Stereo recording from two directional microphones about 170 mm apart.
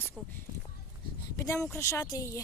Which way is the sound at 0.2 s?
5° left (ahead or behind).